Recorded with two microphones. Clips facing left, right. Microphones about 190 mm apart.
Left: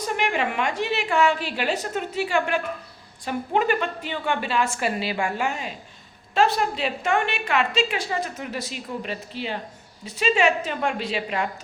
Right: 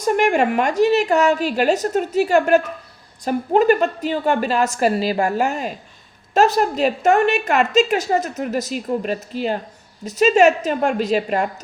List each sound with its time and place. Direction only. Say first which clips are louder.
0.0 s a woman's voice: right 8 dB; 45° right (ahead or behind)